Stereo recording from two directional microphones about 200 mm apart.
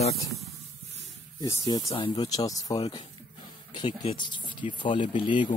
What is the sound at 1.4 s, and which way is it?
Speech, 20° left (ahead or behind).